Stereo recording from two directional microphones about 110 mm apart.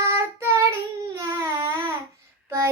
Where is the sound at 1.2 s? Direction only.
25° right (ahead or behind).